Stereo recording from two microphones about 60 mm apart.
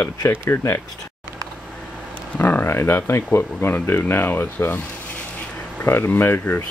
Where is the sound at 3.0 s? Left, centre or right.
Left.